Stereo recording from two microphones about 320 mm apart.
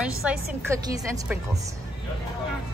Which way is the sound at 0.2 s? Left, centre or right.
Centre.